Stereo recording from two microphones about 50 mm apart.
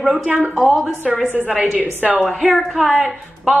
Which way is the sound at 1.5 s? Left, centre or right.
Centre.